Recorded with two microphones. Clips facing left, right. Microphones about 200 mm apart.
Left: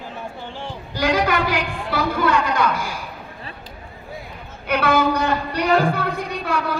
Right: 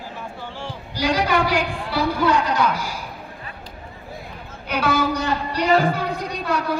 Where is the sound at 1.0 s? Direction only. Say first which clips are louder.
Left 1 dB; 50° left (ahead or behind).